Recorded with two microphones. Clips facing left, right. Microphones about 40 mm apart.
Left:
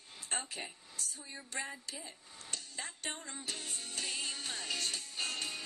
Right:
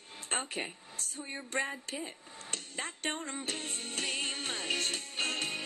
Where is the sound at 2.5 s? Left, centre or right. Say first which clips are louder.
Right 5 dB; right.